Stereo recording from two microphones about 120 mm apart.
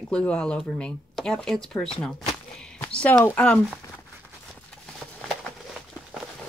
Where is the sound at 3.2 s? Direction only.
10° left (ahead or behind).